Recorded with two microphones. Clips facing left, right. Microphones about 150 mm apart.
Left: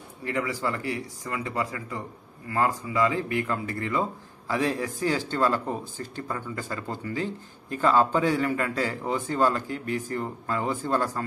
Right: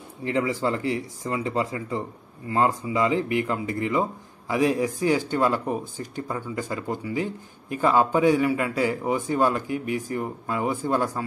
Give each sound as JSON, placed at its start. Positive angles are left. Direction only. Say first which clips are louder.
{"t": 0.2, "sound": "speech", "louder": "right 4 dB", "side_deg": -25}